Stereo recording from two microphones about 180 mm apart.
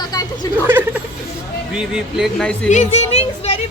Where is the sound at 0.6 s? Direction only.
10° right (ahead or behind).